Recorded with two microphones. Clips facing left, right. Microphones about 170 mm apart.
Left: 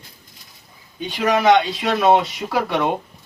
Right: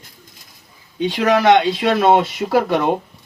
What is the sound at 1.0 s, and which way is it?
Speech, 70° right (ahead or behind).